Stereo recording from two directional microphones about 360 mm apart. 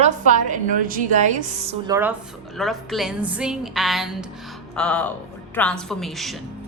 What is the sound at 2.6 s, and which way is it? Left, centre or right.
A woman's voice, centre.